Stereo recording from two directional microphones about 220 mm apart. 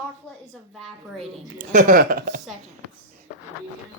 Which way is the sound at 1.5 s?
35° right (ahead or behind).